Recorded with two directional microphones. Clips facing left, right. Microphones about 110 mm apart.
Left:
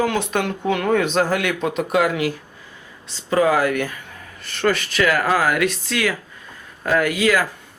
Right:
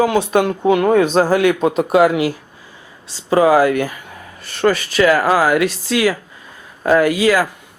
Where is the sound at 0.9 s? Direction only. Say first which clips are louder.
Right 5 dB; 35° right (ahead or behind).